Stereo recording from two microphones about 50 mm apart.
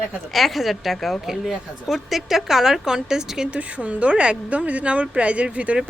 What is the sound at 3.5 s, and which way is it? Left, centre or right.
Speech, right.